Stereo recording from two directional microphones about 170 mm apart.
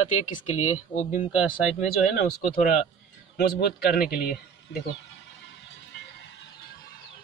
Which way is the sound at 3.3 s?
70° left (ahead or behind).